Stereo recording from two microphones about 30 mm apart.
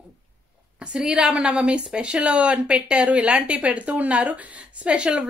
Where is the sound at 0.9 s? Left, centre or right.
Right.